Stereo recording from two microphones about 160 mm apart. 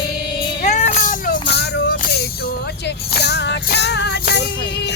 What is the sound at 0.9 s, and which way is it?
Music, 65° left (ahead or behind).